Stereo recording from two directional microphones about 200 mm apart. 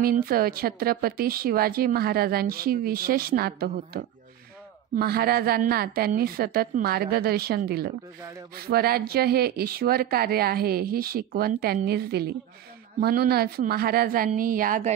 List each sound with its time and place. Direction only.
0.0 s speech: 45° right (ahead or behind)